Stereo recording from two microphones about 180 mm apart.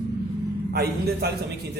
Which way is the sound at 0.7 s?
60° right (ahead or behind).